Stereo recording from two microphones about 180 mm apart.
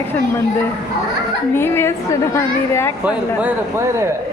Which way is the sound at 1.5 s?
15° left (ahead or behind).